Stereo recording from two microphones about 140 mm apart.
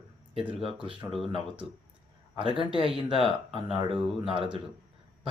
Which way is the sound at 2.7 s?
40° right (ahead or behind).